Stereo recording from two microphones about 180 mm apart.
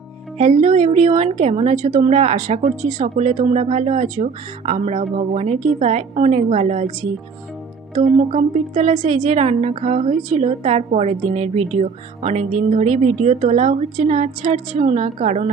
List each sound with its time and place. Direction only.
0.3 s a woman's voice: 35° right (ahead or behind)
8.3 s a woman's voice: 35° right (ahead or behind)